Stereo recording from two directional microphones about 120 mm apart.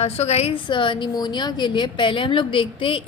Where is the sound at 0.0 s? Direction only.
60° left (ahead or behind).